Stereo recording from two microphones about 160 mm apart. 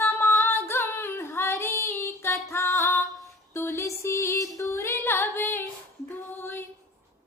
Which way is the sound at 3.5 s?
15° left (ahead or behind).